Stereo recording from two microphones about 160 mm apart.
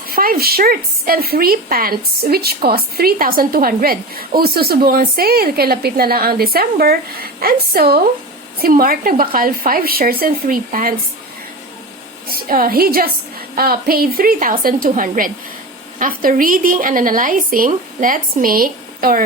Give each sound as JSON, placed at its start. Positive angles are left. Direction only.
{"t": 0.1, "sound": "a woman's voice", "side_deg": -65}
{"t": 12.3, "sound": "a woman's voice", "side_deg": -65}